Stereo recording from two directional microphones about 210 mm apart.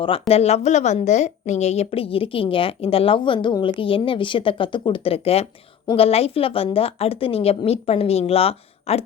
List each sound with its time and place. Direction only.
0.0 s a woman's voice: 25° left (ahead or behind)